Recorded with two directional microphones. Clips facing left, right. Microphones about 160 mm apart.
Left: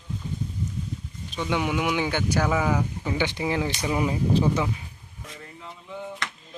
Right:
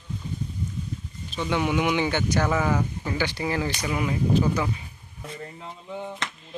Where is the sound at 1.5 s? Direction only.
10° left (ahead or behind).